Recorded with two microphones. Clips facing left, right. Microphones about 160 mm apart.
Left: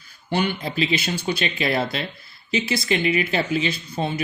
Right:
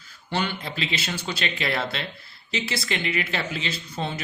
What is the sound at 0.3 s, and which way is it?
Speech, 15° left (ahead or behind).